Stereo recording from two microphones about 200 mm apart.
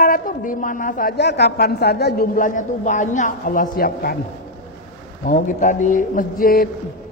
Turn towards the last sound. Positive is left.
turn(degrees=45)  # may be behind; listen again after turning